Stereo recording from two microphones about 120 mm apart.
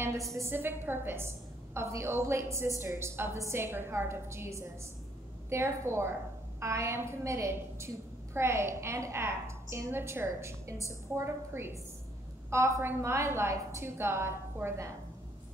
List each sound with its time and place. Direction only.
0.3 s a woman's voice: 20° right (ahead or behind)